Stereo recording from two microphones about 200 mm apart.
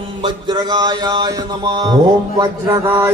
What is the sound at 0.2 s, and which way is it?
Mantra, 20° right (ahead or behind).